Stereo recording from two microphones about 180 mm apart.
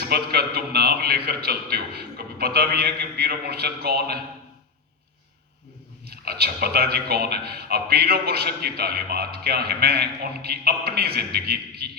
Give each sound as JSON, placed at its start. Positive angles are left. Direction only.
{"t": 0.0, "sound": "a man's voice", "side_deg": -60}
{"t": 6.1, "sound": "a man's voice", "side_deg": -60}